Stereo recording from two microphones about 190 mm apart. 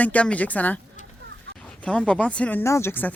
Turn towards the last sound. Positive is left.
turn(degrees=10)  # may be behind; listen again after turning